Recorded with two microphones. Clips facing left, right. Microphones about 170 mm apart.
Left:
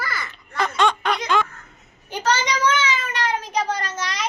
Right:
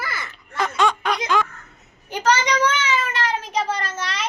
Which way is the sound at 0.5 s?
5° right (ahead or behind).